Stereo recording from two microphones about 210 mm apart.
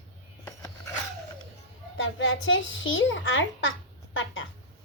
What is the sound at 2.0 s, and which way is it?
A child's voice, 65° left (ahead or behind).